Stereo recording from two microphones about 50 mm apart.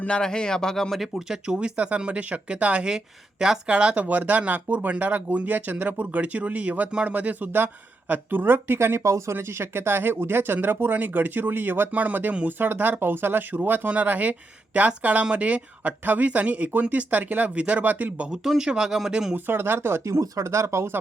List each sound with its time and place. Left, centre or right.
0.1 s speech: centre
0.9 s speech: centre
1.5 s speech: right
2.9 s speech: centre; by 9.0 s right
9.0 s speech: right
9.3 s speech: right
11.9 s speech: right
18.3 s speech: centre
19.5 s speech: right
20.1 s speech: right